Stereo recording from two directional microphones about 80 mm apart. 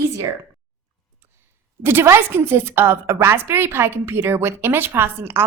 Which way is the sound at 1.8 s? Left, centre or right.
Right.